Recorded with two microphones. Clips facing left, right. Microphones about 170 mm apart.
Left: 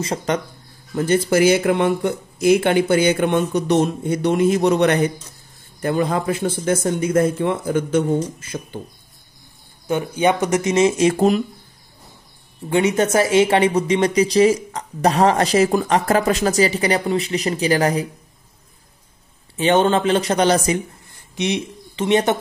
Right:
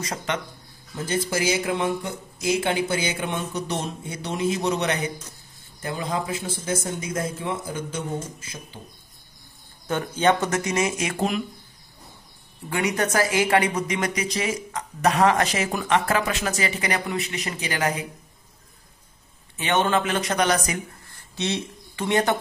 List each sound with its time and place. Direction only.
0.0 s speech: 35° left (ahead or behind)
0.9 s speech: 65° left (ahead or behind)
9.8 s speech: 10° left (ahead or behind); by 11.4 s 40° left (ahead or behind)
12.6 s speech: 25° left (ahead or behind)
19.5 s speech: 30° left (ahead or behind)
21.4 s speech: 15° left (ahead or behind)